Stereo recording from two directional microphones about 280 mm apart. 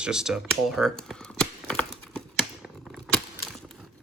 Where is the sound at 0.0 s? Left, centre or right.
Centre.